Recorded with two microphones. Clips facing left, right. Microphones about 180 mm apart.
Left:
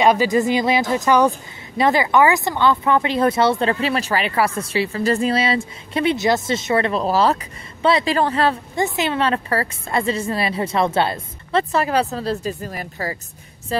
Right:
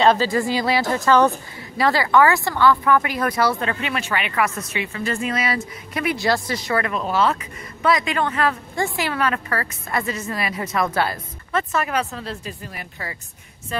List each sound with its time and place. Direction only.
0.0 s speech: 15° left (ahead or behind); by 13.8 s 35° left (ahead or behind)